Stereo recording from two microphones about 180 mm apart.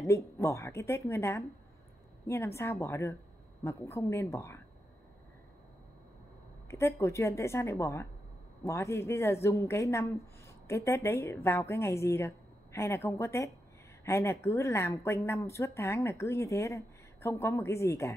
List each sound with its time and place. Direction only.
0.0 s speech: 15° left (ahead or behind)
6.7 s speech: 15° left (ahead or behind)